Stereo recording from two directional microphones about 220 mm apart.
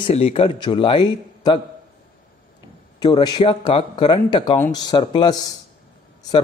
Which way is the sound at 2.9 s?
20° left (ahead or behind).